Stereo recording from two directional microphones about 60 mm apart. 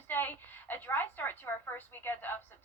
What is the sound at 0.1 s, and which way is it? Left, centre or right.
A woman's voice, left.